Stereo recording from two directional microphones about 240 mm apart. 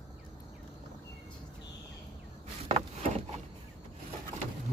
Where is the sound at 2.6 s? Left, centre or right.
Right.